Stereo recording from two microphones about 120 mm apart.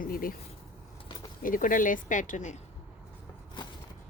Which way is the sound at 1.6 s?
90° left.